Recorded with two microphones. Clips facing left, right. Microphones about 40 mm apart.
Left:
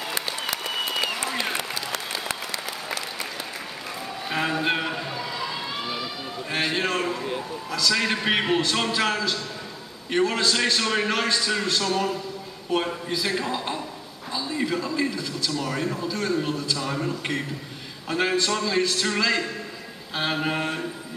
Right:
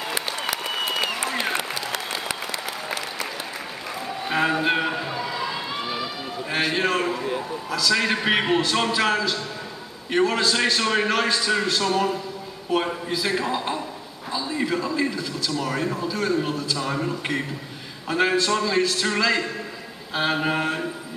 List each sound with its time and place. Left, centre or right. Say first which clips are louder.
0.1 s applause: right 2 dB; centre
4.3 s emergency vehicle: right 3 dB; centre
6.5 s a man's voice: right 2 dB; centre